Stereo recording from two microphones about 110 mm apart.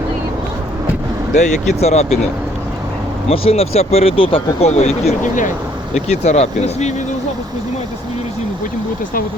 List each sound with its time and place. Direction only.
1.4 s speech: 90° left
3.2 s speech: 65° left (ahead or behind); by 5.1 s 80° left
5.9 s speech: 90° left